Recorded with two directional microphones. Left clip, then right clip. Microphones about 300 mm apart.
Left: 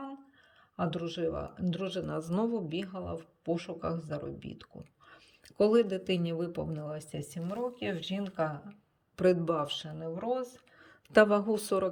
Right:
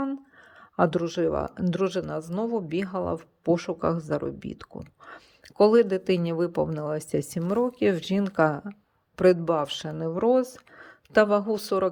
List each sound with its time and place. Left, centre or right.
0.8 s speech: centre
10.8 s speech: centre